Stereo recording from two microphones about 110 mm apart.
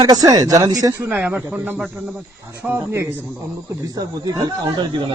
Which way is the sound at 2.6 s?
20° right (ahead or behind).